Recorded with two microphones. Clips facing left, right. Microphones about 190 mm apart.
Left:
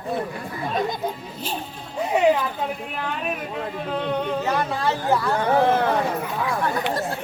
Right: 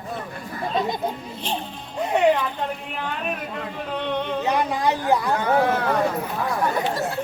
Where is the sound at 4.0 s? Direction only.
5° left (ahead or behind).